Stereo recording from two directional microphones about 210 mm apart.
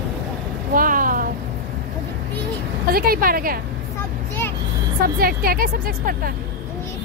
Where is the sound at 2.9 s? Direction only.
45° right (ahead or behind).